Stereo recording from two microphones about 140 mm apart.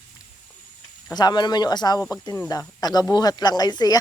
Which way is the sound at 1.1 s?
30° left (ahead or behind).